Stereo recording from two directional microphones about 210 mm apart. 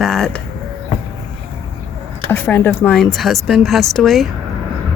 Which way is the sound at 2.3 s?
10° left (ahead or behind).